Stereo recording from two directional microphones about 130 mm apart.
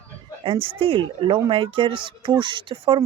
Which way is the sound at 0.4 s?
40° right (ahead or behind).